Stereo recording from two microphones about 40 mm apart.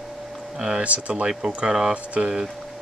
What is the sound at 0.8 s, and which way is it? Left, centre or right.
Speech, right.